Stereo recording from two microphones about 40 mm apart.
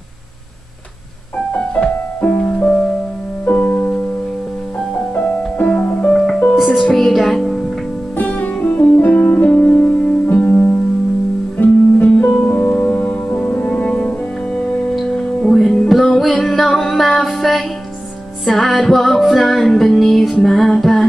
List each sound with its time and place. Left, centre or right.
1.8 s music: left
5.7 s music: left
6.1 s music: centre
8.2 s music: left
8.5 s music: left
9.1 s music: left
11.5 s music: left
12.5 s music: left
15.0 s music: centre